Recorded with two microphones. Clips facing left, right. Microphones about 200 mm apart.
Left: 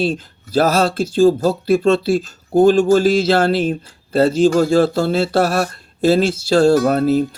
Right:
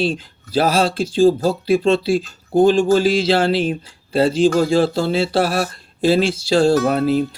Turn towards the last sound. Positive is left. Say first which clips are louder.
# left 2 dB
turn(degrees=45)  # may be behind; listen again after turning